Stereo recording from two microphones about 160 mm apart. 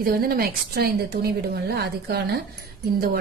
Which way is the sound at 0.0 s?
70° right (ahead or behind).